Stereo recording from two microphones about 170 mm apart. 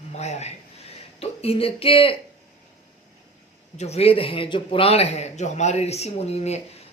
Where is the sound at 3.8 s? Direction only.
35° left (ahead or behind).